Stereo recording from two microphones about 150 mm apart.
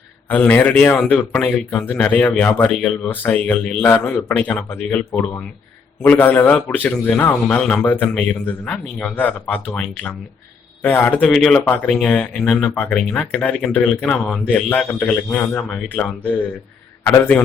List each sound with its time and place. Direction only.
0.3 s a man's voice: 10° left (ahead or behind)